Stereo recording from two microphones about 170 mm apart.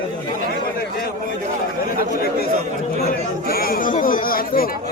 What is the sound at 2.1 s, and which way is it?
Chatter, 60° left (ahead or behind).